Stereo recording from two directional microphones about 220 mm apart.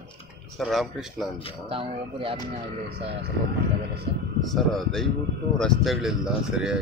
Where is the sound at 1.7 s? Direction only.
25° right (ahead or behind).